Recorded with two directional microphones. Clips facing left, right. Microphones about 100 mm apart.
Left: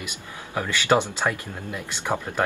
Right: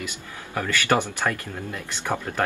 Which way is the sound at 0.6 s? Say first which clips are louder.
Left 1 dB; 15° left (ahead or behind).